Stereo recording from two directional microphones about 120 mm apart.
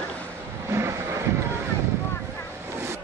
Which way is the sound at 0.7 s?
25° right (ahead or behind).